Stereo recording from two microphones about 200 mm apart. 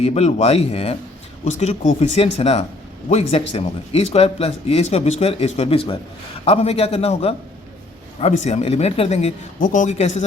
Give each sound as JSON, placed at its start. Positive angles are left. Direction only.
{"t": 0.0, "sound": "speech", "side_deg": 30}